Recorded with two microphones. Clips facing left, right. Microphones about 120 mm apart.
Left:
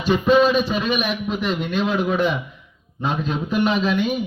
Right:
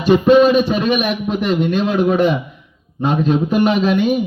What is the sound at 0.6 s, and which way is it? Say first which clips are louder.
Speech: right 5 dB; 50° right (ahead or behind).